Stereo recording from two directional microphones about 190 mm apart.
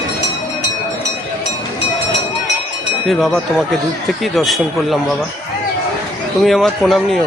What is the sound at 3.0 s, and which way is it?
A man's voice, centre (ahead or behind).